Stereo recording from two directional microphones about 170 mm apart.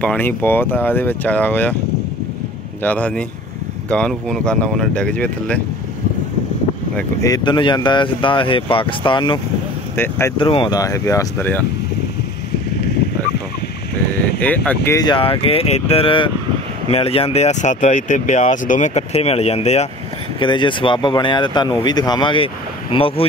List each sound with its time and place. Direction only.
0.0 s speech: 10° left (ahead or behind)
2.8 s speech: 10° left (ahead or behind)
7.2 s speech: 20° left (ahead or behind)
9.9 s speech: 15° left (ahead or behind)
10.3 s speech: 30° left (ahead or behind); by 11.6 s 10° left (ahead or behind)
14.1 s speech: 10° left (ahead or behind)
15.0 s speech: 30° left (ahead or behind)
20.3 s speech: 30° left (ahead or behind)